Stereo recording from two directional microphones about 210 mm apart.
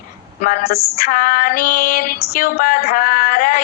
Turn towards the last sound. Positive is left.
turn(degrees=45)  # may be behind; listen again after turning